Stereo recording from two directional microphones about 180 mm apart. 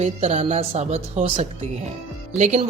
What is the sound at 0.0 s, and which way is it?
A woman's voice, 35° right (ahead or behind).